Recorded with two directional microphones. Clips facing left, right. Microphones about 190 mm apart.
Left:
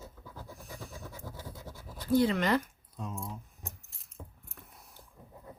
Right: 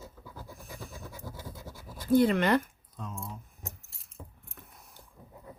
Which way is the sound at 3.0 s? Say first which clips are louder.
Left 1 dB; 10° left (ahead or behind).